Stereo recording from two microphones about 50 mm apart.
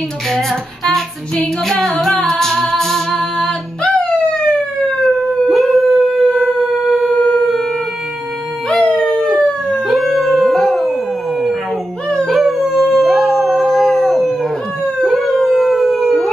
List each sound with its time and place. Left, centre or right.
0.3 s female singing: centre
0.9 s music: centre
3.3 s a sound: centre
4.9 s howl: centre
5.5 s howl: centre
6.8 s a sound: centre
8.6 s howl: centre
9.8 s howl: centre
12.3 s howl: centre